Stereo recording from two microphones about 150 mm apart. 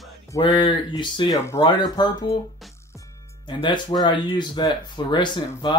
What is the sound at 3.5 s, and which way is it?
Speech, 30° left (ahead or behind).